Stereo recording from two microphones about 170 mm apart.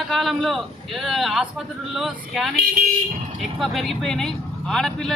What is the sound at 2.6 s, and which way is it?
Speech, 60° right (ahead or behind).